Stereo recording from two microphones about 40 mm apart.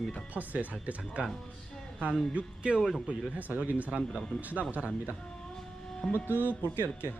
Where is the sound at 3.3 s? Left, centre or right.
Right.